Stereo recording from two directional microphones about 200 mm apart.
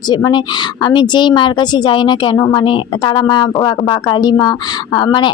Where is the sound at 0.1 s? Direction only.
20° left (ahead or behind).